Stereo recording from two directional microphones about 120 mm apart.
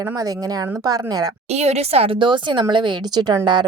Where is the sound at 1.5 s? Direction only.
65° right (ahead or behind); by 3.7 s 40° right (ahead or behind).